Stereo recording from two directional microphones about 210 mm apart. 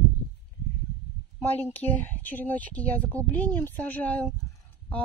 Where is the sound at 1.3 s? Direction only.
10° left (ahead or behind).